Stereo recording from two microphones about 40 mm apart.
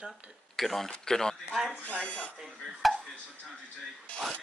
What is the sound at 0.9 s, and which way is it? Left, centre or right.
Speech, centre.